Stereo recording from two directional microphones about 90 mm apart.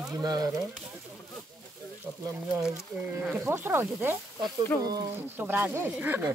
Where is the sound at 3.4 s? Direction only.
25° right (ahead or behind).